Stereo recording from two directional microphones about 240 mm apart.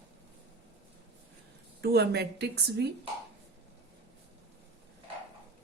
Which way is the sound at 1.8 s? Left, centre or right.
Right.